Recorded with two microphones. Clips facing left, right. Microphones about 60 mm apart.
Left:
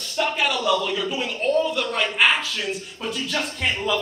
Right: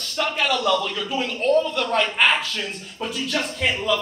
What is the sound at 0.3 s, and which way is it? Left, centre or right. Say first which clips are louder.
A man's voice: right 2 dB; centre.